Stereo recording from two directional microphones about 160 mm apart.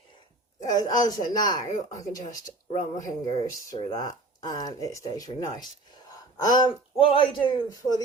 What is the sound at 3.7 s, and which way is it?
Speech, 25° left (ahead or behind).